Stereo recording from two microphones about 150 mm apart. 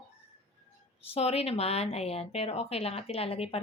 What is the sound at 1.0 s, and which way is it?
Speech, 40° left (ahead or behind).